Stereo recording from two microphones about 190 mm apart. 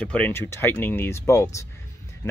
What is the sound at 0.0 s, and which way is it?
Speech, 5° left (ahead or behind).